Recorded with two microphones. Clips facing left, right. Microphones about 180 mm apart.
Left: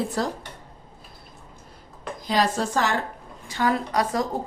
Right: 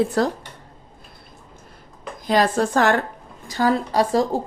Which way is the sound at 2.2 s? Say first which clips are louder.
Right 5 dB; 55° right (ahead or behind).